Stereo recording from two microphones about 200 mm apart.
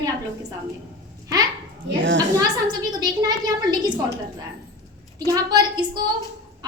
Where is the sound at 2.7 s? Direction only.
20° right (ahead or behind).